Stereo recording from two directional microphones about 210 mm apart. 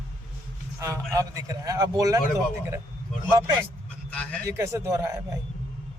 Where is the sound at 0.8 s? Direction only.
15° right (ahead or behind).